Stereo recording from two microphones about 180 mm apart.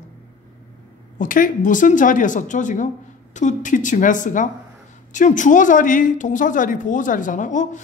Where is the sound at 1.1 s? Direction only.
50° left (ahead or behind).